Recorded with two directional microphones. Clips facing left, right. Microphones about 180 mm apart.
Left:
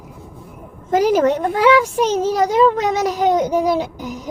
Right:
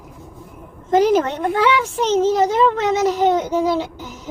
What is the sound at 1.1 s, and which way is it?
A child's voice, 10° left (ahead or behind).